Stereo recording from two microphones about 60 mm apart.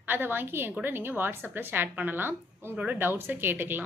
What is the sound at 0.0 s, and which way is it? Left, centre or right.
A woman's voice, right.